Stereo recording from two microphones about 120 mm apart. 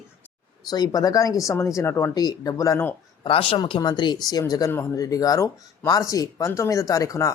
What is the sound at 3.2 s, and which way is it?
Speech, 50° left (ahead or behind).